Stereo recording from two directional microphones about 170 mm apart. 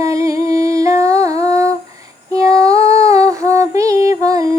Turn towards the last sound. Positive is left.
turn(degrees=-20)  # may be behind; listen again after turning